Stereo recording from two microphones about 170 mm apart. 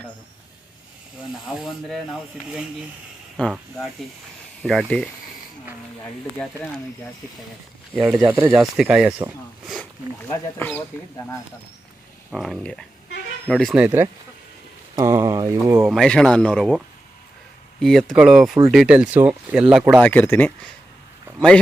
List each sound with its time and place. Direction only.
1.6 s speech: centre (ahead or behind)
4.6 s speech: centre (ahead or behind)
6.3 s speech: 10° left (ahead or behind)
7.9 s speech: 5° right (ahead or behind)
10.2 s speech: 10° left (ahead or behind)
12.3 s speech: centre (ahead or behind)
13.8 s speech: 15° right (ahead or behind)
15.9 s speech: 5° left (ahead or behind)
20.0 s speech: 10° left (ahead or behind)